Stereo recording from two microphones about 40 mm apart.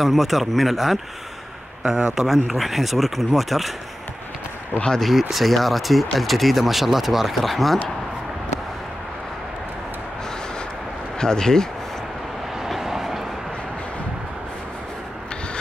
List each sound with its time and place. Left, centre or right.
0.0 s speech: centre
2.1 s speech: centre
4.7 s speech: left
5.3 s speech: centre
11.1 s speech: centre
12.6 s vehicle: centre